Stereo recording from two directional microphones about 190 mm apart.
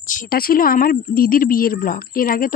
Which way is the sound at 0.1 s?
50° left (ahead or behind).